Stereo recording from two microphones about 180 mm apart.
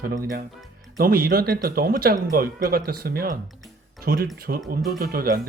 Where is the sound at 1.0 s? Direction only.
55° right (ahead or behind).